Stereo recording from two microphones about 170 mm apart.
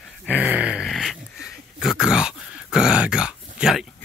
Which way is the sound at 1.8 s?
5° right (ahead or behind).